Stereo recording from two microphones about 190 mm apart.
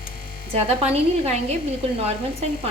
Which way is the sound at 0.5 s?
35° right (ahead or behind).